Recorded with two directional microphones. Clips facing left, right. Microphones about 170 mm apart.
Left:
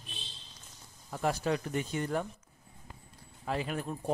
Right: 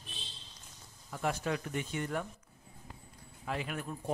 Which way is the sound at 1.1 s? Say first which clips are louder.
Left 3 dB; 35° left (ahead or behind).